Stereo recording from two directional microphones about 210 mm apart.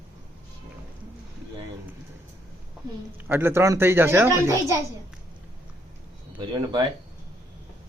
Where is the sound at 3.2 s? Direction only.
10° right (ahead or behind).